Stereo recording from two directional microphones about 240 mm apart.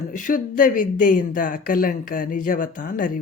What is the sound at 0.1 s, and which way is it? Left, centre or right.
Speech, left.